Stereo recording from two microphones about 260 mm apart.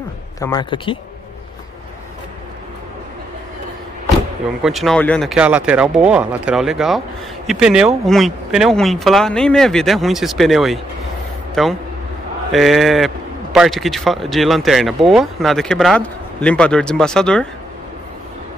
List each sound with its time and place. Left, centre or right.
0.4 s speech: centre
4.6 s a man's voice: centre